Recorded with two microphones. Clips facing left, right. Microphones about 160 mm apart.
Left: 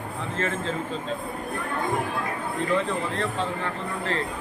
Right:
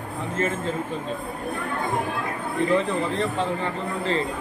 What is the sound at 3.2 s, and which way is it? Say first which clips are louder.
Speech: right 3 dB; 15° right (ahead or behind).